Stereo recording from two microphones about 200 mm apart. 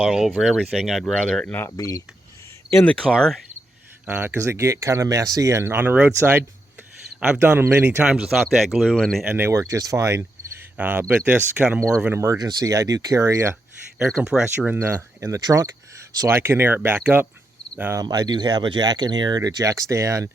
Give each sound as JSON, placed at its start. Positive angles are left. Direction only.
{"t": 0.0, "sound": "speech", "side_deg": -5}
{"t": 14.0, "sound": "speech", "side_deg": 0}
{"t": 18.0, "sound": "speech", "side_deg": -20}